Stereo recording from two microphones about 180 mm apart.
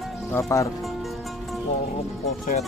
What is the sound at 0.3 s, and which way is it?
Speech, 15° left (ahead or behind).